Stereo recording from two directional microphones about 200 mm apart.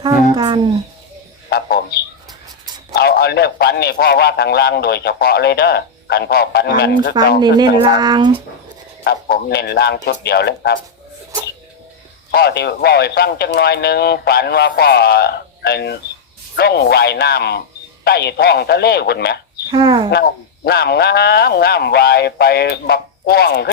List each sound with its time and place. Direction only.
0.0 s speech: 25° right (ahead or behind)
1.5 s a sound: 50° left (ahead or behind)
2.9 s a man's voice: 50° left (ahead or behind)
7.4 s speech: 20° right (ahead or behind)
9.0 s a man's voice: 55° left (ahead or behind)
12.3 s a man's voice: 55° left (ahead or behind)
19.7 s speech: 20° right (ahead or behind)
20.1 s a man's voice: 55° left (ahead or behind)